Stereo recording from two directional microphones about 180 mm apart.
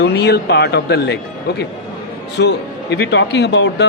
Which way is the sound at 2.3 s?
70° left (ahead or behind).